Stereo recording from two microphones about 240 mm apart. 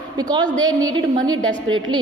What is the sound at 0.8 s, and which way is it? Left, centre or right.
A woman's voice, centre.